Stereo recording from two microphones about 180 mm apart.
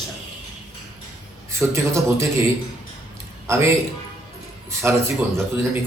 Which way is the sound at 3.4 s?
15° right (ahead or behind).